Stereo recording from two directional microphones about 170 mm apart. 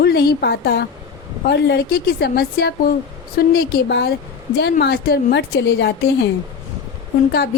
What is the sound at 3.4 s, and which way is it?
A woman's voice, 80° left.